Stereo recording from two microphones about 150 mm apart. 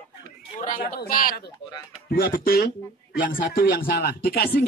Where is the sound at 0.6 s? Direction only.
65° left (ahead or behind).